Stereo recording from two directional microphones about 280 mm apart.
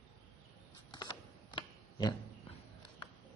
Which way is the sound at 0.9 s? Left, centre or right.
Centre.